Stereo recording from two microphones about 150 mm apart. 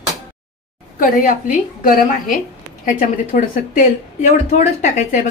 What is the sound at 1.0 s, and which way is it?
A woman's voice, 65° left (ahead or behind).